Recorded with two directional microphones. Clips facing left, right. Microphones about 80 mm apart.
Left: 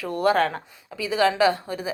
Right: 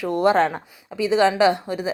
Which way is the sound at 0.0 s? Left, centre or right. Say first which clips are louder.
Right 3 dB; right.